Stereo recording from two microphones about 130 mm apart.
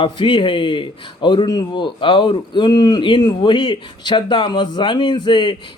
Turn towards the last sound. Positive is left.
turn(degrees=35)  # may be behind; listen again after turning